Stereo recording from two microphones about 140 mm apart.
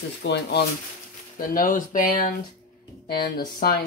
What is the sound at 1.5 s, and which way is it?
Speech, 75° left (ahead or behind).